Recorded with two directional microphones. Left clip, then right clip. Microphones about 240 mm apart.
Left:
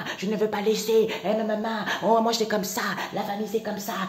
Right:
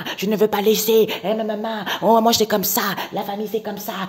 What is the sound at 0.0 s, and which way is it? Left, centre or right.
Speech, right.